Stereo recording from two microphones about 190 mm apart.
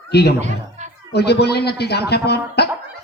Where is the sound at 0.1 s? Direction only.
60° left (ahead or behind).